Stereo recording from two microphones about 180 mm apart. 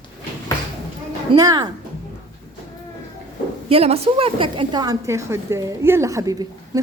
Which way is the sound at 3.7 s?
35° right (ahead or behind).